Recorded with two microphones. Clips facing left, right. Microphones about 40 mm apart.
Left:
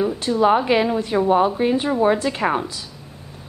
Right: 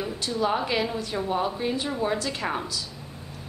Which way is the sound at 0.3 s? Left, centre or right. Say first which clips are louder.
Left 8 dB; left.